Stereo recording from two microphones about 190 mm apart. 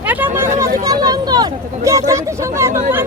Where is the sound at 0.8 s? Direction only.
20° right (ahead or behind).